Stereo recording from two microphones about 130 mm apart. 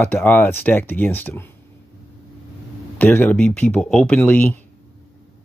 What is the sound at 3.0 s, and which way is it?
Speech, 15° left (ahead or behind).